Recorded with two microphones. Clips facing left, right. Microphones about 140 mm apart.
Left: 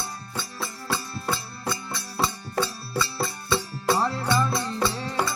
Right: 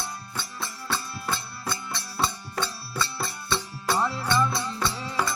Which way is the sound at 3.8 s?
35° left (ahead or behind).